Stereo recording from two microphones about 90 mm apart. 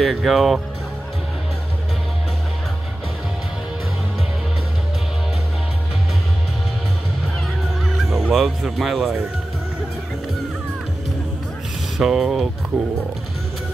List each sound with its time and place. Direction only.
0.0 s speech: centre (ahead or behind)
8.0 s speech: centre (ahead or behind)
12.0 s speech: 5° right (ahead or behind)